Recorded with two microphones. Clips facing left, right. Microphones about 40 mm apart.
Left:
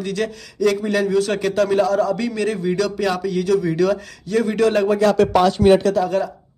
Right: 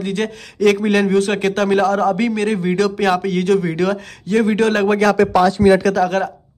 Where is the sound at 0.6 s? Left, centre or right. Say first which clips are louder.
Right 4 dB; right.